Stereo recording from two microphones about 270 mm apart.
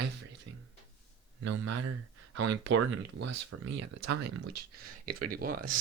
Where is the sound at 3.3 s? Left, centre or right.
Right.